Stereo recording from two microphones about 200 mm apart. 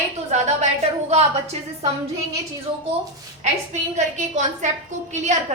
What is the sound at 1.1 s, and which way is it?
Speech, 30° right (ahead or behind).